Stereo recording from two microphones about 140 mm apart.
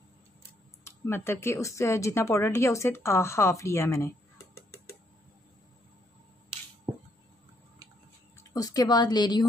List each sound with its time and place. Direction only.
0.8 s speech: 15° left (ahead or behind)
8.5 s a woman's voice: 25° left (ahead or behind)